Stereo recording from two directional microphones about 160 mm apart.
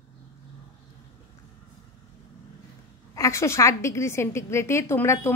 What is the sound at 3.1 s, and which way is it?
A woman's voice, 20° left (ahead or behind).